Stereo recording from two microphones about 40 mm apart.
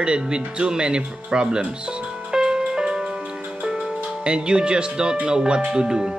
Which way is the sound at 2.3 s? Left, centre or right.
Centre.